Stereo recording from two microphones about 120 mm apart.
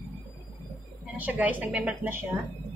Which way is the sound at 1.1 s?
15° right (ahead or behind).